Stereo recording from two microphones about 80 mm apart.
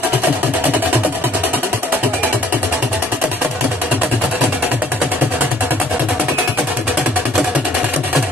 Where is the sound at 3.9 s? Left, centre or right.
Centre.